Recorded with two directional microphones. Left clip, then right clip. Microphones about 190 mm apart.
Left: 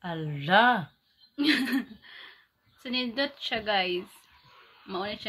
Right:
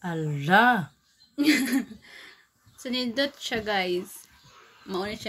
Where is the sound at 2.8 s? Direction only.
5° left (ahead or behind).